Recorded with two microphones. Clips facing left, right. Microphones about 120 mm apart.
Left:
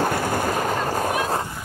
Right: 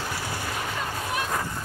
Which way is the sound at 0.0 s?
50° left (ahead or behind).